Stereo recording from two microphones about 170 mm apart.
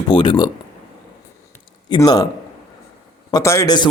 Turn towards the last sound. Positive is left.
turn(degrees=25)  # may be behind; listen again after turning